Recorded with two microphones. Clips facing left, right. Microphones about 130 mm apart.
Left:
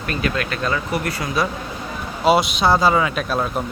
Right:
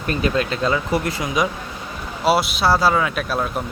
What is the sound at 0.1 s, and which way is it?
Speech, 30° right (ahead or behind).